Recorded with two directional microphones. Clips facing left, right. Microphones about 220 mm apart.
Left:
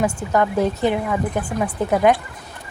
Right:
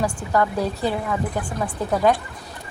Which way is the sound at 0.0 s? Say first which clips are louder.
Left 2 dB; 20° left (ahead or behind).